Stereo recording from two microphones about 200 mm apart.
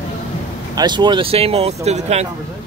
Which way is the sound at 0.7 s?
20° right (ahead or behind).